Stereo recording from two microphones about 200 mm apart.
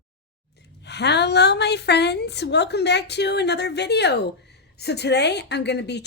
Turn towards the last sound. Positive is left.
turn(degrees=60)  # may be behind; listen again after turning